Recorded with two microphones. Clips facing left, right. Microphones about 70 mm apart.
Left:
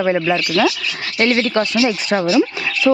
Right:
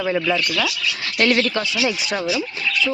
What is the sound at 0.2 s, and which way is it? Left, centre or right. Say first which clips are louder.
A woman's voice: left 5 dB; left.